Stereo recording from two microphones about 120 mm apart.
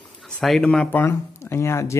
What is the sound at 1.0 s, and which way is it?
Speech, 20° left (ahead or behind).